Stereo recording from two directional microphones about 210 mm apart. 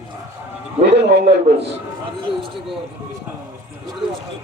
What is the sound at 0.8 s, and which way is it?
Speech, 55° right (ahead or behind).